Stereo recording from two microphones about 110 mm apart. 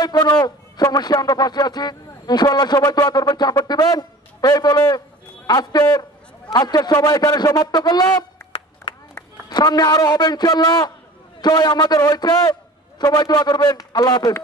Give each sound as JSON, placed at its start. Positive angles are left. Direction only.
{"t": 0.0, "sound": "a man's voice", "side_deg": 35}